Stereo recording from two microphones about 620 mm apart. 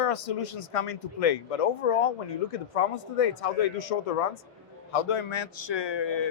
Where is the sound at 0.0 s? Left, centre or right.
Left.